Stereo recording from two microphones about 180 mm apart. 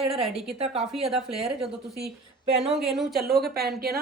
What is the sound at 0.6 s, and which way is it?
Speech, 35° right (ahead or behind).